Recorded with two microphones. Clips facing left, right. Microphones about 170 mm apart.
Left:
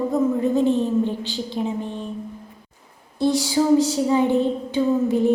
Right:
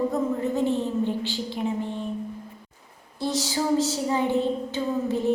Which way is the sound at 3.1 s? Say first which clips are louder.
Left 7 dB; 15° left (ahead or behind).